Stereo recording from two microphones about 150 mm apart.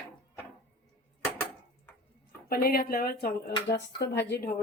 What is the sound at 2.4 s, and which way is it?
A woman's voice, 90° left.